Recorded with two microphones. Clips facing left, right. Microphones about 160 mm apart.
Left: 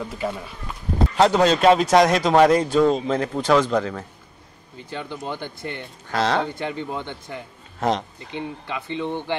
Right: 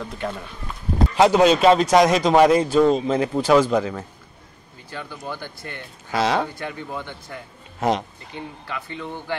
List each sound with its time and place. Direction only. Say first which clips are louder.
0.0 s speech: left 1 dB; 5° left (ahead or behind)
1.1 s speech: right 2 dB; 10° right (ahead or behind)
1.7 s speech: even; centre (ahead or behind)
4.8 s speech: left 2 dB; 20° left (ahead or behind)
6.0 s speech: right 1 dB; 5° right (ahead or behind)
6.4 s speech: left 3 dB; 20° left (ahead or behind)